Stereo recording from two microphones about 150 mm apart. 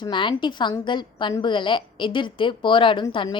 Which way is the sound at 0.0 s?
30° left (ahead or behind).